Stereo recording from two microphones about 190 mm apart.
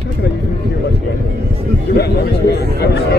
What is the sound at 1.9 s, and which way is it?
Chatter, 60° left (ahead or behind).